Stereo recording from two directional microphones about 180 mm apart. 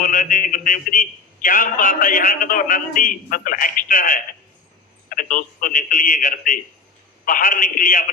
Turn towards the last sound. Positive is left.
turn(degrees=50)  # may be behind; listen again after turning